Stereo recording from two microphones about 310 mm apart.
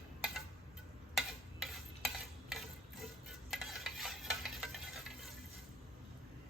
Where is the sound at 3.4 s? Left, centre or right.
Centre.